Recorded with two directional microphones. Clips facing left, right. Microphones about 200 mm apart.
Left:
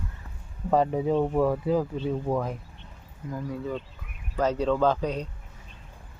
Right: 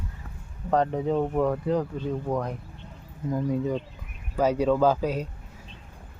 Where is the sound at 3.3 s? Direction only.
20° right (ahead or behind).